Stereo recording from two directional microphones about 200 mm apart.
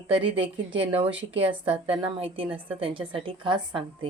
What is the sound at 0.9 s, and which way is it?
A woman's voice, 30° right (ahead or behind).